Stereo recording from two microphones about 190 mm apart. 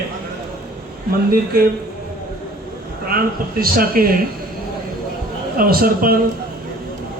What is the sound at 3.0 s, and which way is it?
Speech, 50° right (ahead or behind).